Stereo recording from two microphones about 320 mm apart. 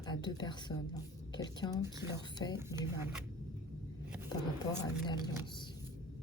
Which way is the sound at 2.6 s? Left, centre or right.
Centre.